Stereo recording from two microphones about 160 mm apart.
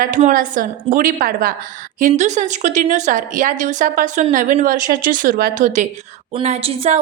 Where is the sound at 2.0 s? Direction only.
50° right (ahead or behind).